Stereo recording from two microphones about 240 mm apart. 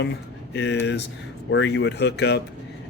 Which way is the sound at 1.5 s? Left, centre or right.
Left.